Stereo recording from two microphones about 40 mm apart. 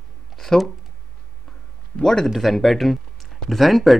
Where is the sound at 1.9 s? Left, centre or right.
Centre.